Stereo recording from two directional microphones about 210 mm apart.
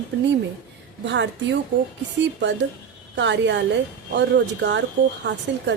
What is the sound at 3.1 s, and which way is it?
A woman's voice, 60° right (ahead or behind).